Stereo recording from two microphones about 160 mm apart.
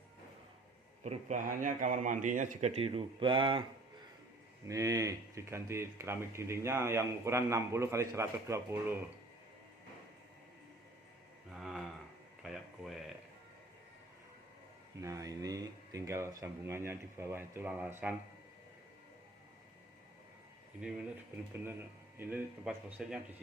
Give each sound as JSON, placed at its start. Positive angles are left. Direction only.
{"t": 1.0, "sound": "a man's voice", "side_deg": -45}
{"t": 4.6, "sound": "speech", "side_deg": -20}
{"t": 11.5, "sound": "a sound", "side_deg": 0}
{"t": 15.0, "sound": "speech", "side_deg": -20}
{"t": 20.8, "sound": "speech", "side_deg": -5}